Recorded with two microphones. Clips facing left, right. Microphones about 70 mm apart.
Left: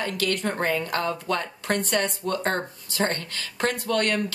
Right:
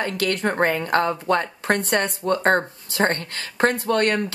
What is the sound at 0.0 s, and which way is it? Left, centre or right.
Speech, right.